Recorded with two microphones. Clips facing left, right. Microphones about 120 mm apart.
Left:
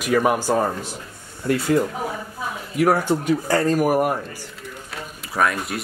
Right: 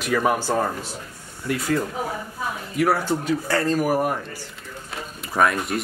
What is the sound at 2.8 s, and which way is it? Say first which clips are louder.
Speech: left 3 dB; 15° left (ahead or behind).